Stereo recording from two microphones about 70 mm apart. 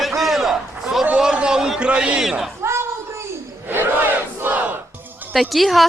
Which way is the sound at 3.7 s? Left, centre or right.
Right.